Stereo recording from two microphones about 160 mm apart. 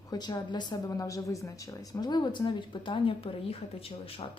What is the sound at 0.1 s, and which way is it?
A woman's voice, 25° left (ahead or behind).